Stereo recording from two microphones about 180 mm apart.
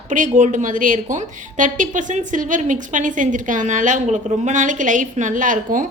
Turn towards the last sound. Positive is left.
turn(degrees=-45)  # may be behind; listen again after turning